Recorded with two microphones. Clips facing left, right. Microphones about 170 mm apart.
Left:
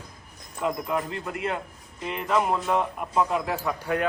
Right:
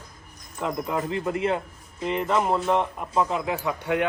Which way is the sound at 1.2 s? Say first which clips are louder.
Right 5 dB; 25° right (ahead or behind).